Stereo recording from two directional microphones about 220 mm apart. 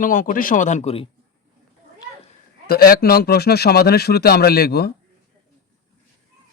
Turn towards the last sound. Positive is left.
turn(degrees=45)  # may be behind; listen again after turning